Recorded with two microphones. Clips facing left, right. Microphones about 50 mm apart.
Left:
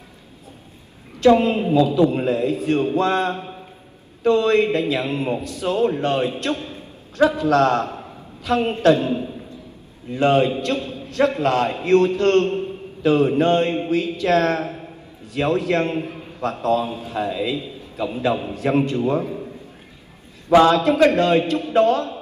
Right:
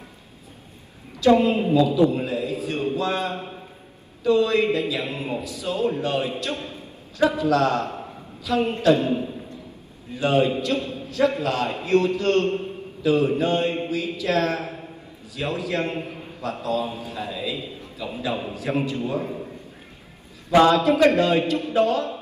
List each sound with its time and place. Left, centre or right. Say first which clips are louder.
1.1 s a woman's voice: left 2 dB; left
20.4 s a man's voice: left 2 dB; left